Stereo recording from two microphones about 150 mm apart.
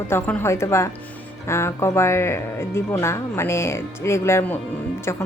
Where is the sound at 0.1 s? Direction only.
15° left (ahead or behind).